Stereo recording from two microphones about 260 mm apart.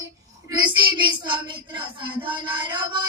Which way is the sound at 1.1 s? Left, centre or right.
Centre.